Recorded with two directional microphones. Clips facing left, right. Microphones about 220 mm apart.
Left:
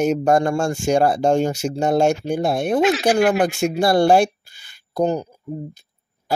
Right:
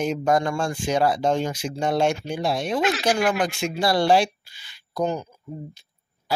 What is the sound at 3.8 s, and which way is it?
Speech, 50° left (ahead or behind).